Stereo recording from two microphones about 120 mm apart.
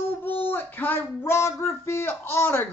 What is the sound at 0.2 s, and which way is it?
A woman's voice, 15° left (ahead or behind).